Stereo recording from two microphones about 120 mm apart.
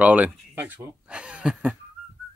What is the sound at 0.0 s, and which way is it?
Speech, 15° right (ahead or behind).